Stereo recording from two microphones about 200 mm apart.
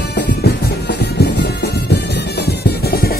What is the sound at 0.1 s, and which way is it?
Music, 55° left (ahead or behind).